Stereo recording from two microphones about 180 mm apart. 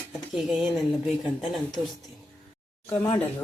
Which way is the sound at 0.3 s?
5° right (ahead or behind).